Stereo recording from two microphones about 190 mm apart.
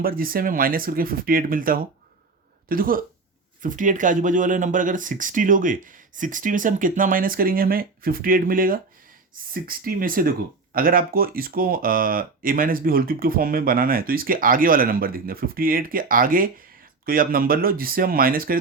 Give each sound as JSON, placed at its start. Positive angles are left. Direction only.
{"t": 0.0, "sound": "speech", "side_deg": -50}